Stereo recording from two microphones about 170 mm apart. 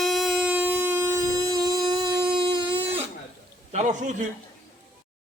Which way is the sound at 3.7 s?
45° right (ahead or behind).